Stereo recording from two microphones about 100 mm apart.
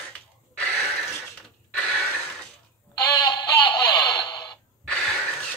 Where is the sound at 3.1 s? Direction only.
45° left (ahead or behind).